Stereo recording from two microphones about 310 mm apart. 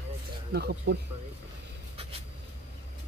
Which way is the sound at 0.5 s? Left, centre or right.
Right.